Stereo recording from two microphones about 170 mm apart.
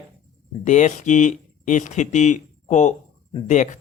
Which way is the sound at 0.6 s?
45° left (ahead or behind).